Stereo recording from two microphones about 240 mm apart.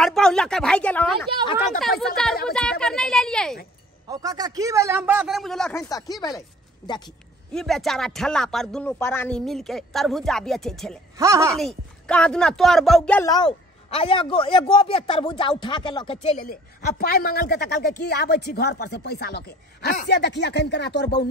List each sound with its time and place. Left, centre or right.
0.0 s speech: centre
4.1 s speech: centre
7.5 s speech: centre
11.1 s speech: centre
11.5 s speech: centre
13.8 s a man's voice: left